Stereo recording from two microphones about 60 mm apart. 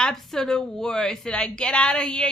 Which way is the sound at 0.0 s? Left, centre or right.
Centre.